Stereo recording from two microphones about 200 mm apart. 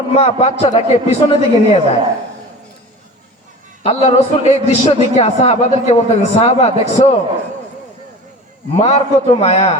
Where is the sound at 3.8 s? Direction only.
30° left (ahead or behind).